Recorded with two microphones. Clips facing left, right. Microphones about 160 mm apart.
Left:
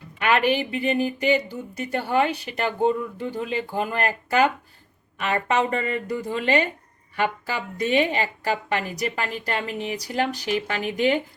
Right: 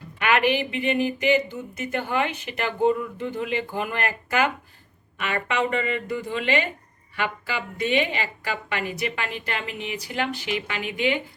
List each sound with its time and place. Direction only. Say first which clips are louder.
0.2 s speech: left 1 dB; 35° left (ahead or behind)